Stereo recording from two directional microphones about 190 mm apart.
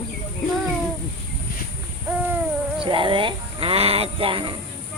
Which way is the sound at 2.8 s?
25° right (ahead or behind).